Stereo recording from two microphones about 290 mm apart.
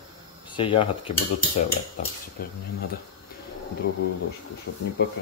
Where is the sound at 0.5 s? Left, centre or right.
Centre.